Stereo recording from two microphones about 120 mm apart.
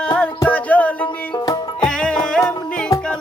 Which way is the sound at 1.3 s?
35° left (ahead or behind).